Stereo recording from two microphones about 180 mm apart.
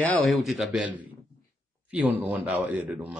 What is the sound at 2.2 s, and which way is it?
Speech, 10° right (ahead or behind).